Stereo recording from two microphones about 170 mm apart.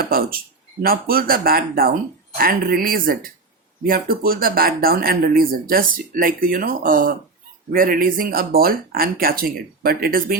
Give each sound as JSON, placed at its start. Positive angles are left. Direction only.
{"t": 0.0, "sound": "speech", "side_deg": -60}